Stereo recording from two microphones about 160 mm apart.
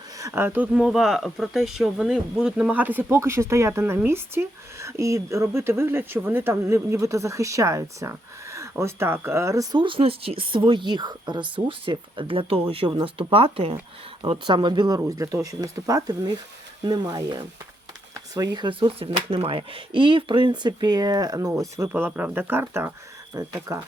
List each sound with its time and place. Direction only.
0.2 s speech: 15° right (ahead or behind)
9.7 s speech: 30° right (ahead or behind)